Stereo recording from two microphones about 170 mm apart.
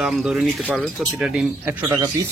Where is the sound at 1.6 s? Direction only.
15° right (ahead or behind).